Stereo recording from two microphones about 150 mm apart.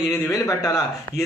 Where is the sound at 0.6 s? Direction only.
20° left (ahead or behind).